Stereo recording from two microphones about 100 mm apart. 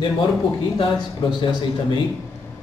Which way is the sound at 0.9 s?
50° left (ahead or behind).